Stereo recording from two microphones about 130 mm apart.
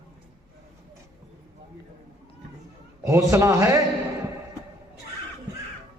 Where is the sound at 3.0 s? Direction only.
20° right (ahead or behind).